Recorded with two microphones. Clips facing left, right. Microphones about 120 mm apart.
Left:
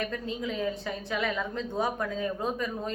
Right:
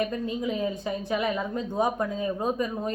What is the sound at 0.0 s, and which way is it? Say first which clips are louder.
Speech: right 5 dB; 15° right (ahead or behind).